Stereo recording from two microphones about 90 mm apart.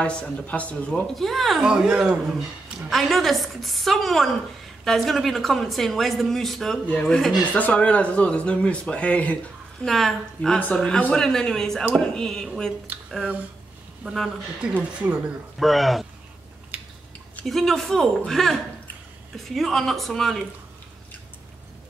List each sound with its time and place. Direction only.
0.0 s speech: 15° left (ahead or behind)
1.1 s speech: centre (ahead or behind)
6.9 s speech: 15° left (ahead or behind)
9.8 s speech: 5° left (ahead or behind)
14.6 s speech: 10° right (ahead or behind)
15.6 s speech: centre (ahead or behind)
16.7 s scissors: 15° right (ahead or behind)
17.5 s speech: 5° left (ahead or behind)